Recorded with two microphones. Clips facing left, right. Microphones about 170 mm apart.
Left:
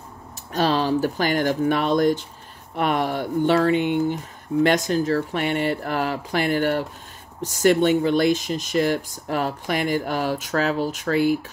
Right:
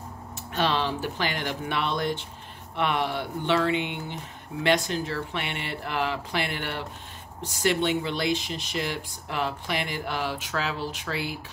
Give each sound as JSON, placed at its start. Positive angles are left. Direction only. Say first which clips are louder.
{"t": 0.5, "sound": "speech", "louder": "left 6 dB", "side_deg": 40}